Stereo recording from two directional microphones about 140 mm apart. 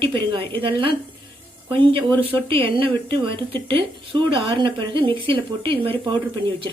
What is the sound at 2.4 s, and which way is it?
Speech, 40° right (ahead or behind).